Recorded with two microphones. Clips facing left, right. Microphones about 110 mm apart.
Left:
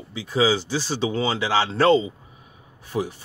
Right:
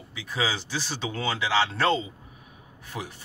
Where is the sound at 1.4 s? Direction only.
40° left (ahead or behind).